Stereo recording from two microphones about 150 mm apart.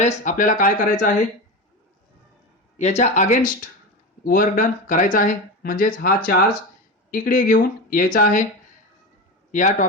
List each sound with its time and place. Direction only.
0.0 s speech: 60° left (ahead or behind)
2.7 s speech: 50° left (ahead or behind)
4.2 s speech: 70° left (ahead or behind)
9.5 s speech: 60° left (ahead or behind)